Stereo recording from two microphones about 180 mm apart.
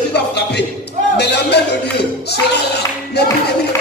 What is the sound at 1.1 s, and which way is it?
Clapping, 70° left (ahead or behind).